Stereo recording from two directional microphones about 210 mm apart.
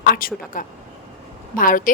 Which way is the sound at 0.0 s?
45° left (ahead or behind).